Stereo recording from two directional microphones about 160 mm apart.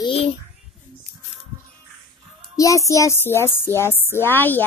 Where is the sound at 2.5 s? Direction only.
20° left (ahead or behind).